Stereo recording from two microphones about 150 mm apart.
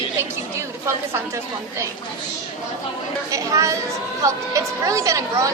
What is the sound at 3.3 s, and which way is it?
A woman's voice, 20° right (ahead or behind).